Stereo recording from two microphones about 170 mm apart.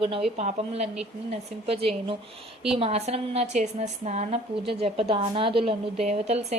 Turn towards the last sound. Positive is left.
turn(degrees=-40)  # may be behind; listen again after turning